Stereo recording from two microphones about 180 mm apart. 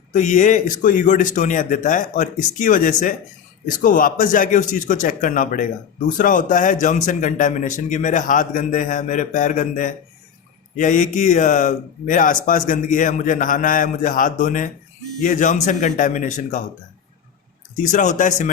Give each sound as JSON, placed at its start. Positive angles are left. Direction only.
{"t": 0.1, "sound": "a man's voice", "side_deg": 40}
{"t": 17.7, "sound": "a man's voice", "side_deg": 45}